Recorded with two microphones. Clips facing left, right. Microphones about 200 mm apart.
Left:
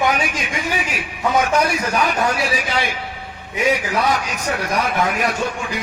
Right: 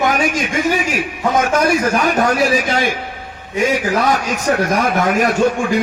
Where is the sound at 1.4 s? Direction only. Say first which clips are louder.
Right 4 dB; 45° right (ahead or behind).